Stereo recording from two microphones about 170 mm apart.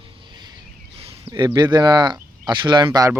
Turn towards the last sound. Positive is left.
turn(degrees=-20)  # may be behind; listen again after turning